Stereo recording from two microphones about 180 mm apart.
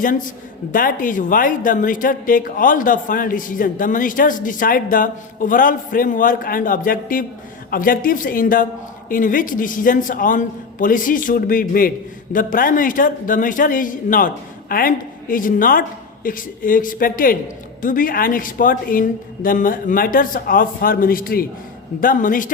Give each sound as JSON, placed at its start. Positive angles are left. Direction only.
{"t": 0.0, "sound": "a man's voice", "side_deg": 45}